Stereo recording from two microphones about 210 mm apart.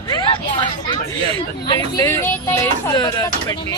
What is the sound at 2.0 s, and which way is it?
Speech, 10° left (ahead or behind).